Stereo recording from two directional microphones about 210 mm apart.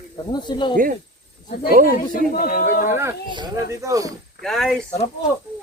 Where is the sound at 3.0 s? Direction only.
15° right (ahead or behind).